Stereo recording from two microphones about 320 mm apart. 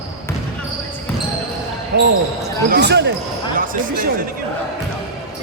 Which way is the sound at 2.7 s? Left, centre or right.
Right.